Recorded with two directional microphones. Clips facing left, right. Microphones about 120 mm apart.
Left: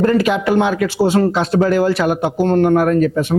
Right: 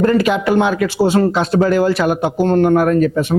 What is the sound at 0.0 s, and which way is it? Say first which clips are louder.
Speech: right 1 dB; 20° right (ahead or behind).